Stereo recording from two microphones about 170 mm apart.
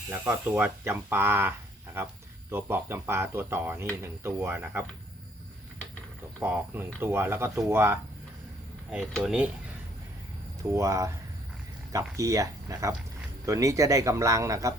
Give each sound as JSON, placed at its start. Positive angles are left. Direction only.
{"t": 0.1, "sound": "speech", "side_deg": -15}
{"t": 6.4, "sound": "speech", "side_deg": -10}
{"t": 10.6, "sound": "a man's voice", "side_deg": -15}